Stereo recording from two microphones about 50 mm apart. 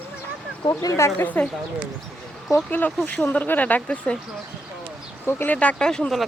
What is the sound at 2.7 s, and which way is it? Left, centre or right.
Speech, left.